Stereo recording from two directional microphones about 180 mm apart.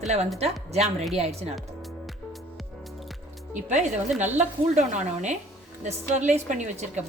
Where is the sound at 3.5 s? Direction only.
40° right (ahead or behind).